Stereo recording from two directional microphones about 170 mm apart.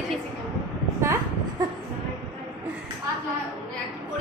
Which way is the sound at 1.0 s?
15° right (ahead or behind).